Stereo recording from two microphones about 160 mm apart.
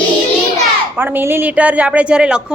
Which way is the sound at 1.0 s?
10° right (ahead or behind).